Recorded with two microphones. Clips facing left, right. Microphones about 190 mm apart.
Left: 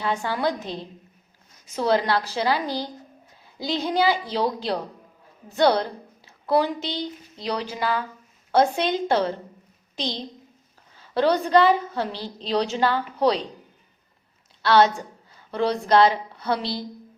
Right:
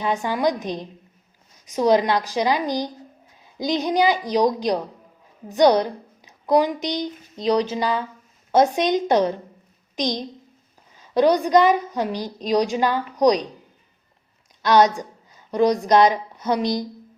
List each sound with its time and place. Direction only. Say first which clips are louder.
0.0 s a woman's voice: right 3 dB; 15° right (ahead or behind)
14.6 s a woman's voice: right 2 dB; 15° right (ahead or behind)